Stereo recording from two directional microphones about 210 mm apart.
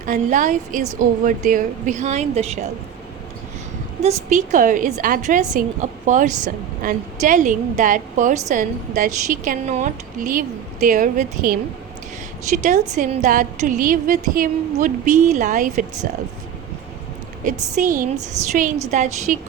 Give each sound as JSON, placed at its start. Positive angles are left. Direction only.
{"t": 0.0, "sound": "a woman's voice", "side_deg": -35}
{"t": 4.0, "sound": "a woman's voice", "side_deg": -35}
{"t": 17.4, "sound": "a woman's voice", "side_deg": -40}